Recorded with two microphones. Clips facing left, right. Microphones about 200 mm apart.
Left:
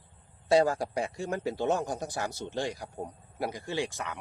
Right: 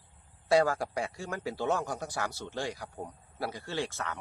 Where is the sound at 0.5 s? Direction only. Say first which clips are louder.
Left 2 dB; 20° left (ahead or behind).